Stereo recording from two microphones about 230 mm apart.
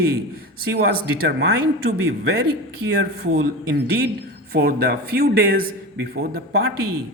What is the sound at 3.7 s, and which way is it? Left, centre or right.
Speech, right.